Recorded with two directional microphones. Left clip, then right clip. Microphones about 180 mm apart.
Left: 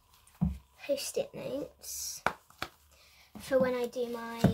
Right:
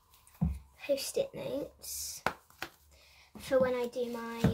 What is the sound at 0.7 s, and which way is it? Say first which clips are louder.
Speech: right 1 dB; 5° left (ahead or behind).